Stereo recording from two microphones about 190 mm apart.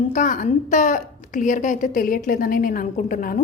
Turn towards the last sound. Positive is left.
turn(degrees=45)  # may be behind; listen again after turning